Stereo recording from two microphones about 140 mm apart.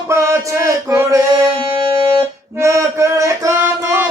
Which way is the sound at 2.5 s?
20° right (ahead or behind).